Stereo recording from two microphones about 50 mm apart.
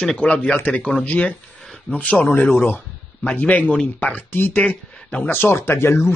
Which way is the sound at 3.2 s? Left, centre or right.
Left.